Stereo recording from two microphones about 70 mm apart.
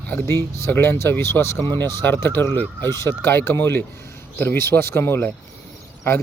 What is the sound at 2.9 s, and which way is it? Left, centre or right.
Speech, left.